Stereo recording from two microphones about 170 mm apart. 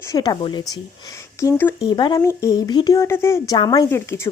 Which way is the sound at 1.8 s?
25° left (ahead or behind).